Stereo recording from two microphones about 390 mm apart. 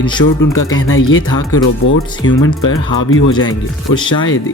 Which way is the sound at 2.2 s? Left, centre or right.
Left.